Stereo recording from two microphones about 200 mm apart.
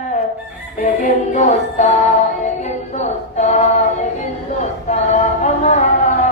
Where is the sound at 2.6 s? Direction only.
35° left (ahead or behind).